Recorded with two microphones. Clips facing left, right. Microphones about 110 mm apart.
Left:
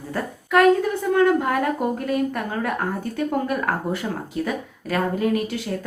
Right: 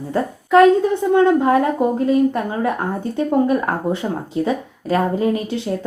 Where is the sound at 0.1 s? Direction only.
25° right (ahead or behind).